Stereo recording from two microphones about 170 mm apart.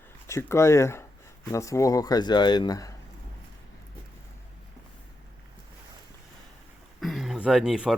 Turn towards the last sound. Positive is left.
turn(degrees=-5)  # may be behind; listen again after turning